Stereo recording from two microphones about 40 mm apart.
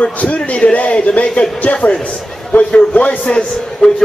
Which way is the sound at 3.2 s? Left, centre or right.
Centre.